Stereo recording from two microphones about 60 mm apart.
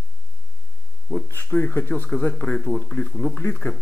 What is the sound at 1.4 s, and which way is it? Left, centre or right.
Speech, left.